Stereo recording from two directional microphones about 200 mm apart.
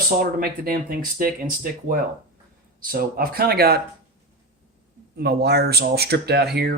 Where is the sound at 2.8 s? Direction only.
45° right (ahead or behind).